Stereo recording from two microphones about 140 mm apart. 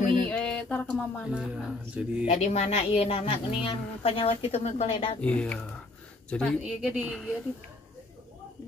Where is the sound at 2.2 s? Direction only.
55° left (ahead or behind).